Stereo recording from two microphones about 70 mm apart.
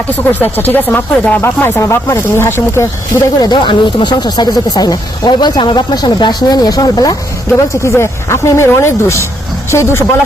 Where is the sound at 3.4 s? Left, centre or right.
Left.